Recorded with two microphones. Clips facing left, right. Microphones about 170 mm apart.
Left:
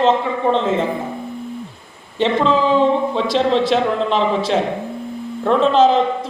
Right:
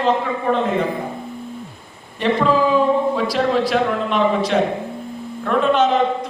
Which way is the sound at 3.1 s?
25° left (ahead or behind).